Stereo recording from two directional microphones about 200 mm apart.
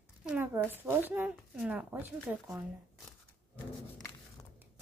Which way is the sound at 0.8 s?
10° right (ahead or behind).